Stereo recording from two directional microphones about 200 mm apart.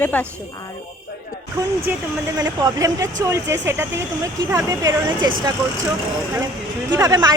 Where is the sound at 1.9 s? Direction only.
10° right (ahead or behind).